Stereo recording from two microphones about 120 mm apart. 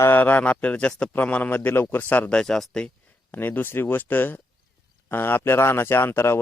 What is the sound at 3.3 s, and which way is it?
A man's voice, 15° left (ahead or behind).